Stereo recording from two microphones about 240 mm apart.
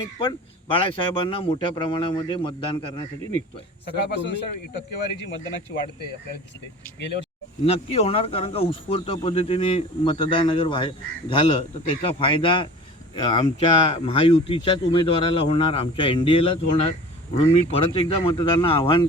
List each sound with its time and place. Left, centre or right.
0.2 s speech: left
3.9 s speech: left
7.6 s speech: left